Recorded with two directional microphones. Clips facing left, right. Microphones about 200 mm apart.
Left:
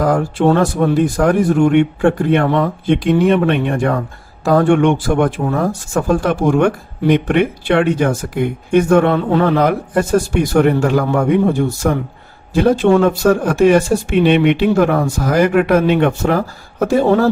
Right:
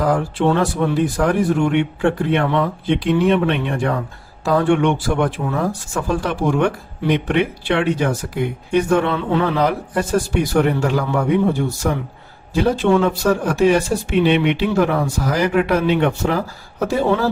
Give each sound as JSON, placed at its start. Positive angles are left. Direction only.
{"t": 0.0, "sound": "speech", "side_deg": 45}